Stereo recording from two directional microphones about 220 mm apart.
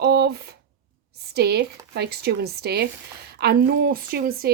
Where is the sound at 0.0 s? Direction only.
45° right (ahead or behind).